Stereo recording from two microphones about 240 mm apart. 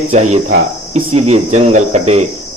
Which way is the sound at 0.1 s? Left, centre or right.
Right.